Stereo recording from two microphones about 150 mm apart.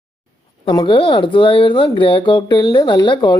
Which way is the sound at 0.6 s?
30° left (ahead or behind).